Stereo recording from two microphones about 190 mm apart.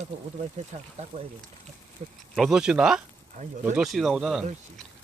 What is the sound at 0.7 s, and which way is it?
Speech, 35° right (ahead or behind).